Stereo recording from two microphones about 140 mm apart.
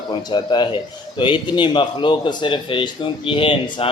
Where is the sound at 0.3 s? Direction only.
35° left (ahead or behind).